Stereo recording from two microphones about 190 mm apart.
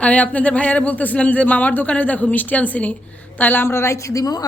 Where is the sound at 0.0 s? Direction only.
5° left (ahead or behind).